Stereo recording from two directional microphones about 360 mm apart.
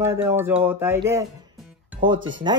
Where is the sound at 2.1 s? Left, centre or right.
Right.